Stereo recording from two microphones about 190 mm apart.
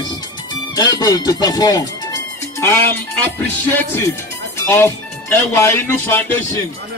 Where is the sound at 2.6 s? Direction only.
10° left (ahead or behind).